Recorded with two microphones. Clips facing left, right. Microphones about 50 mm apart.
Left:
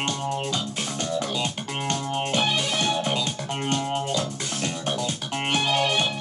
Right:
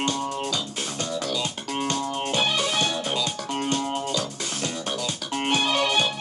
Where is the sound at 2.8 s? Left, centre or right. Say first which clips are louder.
Left 1 dB; left.